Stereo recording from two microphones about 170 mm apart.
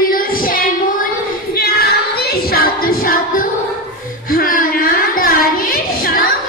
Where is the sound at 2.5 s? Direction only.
55° left (ahead or behind).